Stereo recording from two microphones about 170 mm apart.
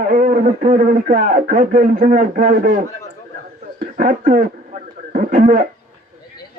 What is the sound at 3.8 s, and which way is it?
Speech, 55° right (ahead or behind).